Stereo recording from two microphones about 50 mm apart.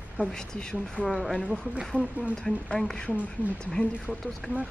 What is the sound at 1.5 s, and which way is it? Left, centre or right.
Speech, centre.